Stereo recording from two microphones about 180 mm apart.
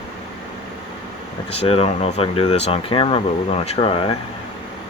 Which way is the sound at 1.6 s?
35° left (ahead or behind).